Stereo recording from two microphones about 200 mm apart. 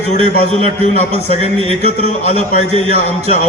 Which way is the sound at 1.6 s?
35° left (ahead or behind).